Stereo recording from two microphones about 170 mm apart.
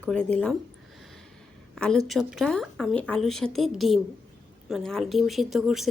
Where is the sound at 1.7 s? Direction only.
5° left (ahead or behind).